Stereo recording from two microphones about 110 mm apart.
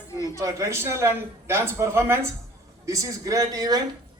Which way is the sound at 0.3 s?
30° right (ahead or behind).